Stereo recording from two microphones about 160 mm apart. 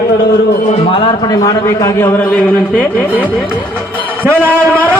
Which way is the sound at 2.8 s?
10° right (ahead or behind).